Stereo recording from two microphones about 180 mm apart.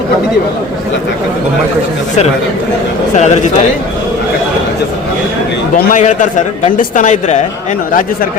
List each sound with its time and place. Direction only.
3.2 s a man's voice: 40° left (ahead or behind)
5.7 s a man's voice: 45° left (ahead or behind)